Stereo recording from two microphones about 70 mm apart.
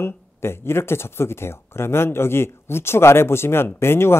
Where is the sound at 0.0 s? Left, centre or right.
Left.